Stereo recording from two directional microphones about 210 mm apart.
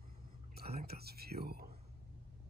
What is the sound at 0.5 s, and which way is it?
Speech, 45° right (ahead or behind).